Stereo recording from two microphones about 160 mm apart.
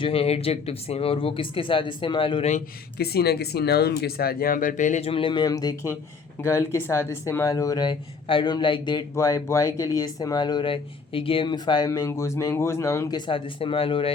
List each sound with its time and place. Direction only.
0.0 s speech: 35° left (ahead or behind)
3.0 s speech: 80° left; by 14.1 s 35° left (ahead or behind)